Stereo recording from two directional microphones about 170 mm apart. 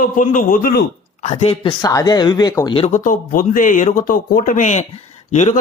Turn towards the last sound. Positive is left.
turn(degrees=40)  # may be behind; listen again after turning